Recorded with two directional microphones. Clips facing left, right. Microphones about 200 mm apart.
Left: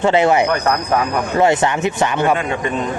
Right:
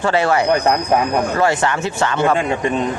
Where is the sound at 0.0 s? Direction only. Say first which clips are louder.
Left 2 dB; 20° left (ahead or behind).